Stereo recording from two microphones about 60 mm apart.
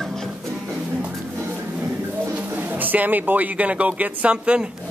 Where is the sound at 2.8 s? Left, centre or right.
Right.